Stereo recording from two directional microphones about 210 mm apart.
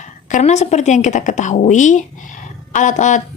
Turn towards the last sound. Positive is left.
turn(degrees=35)  # may be behind; listen again after turning